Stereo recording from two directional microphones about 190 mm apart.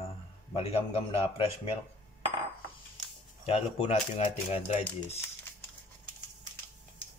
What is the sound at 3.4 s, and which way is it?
A man's voice, 35° left (ahead or behind).